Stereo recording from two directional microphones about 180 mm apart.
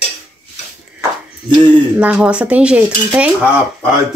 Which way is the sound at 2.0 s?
5° right (ahead or behind).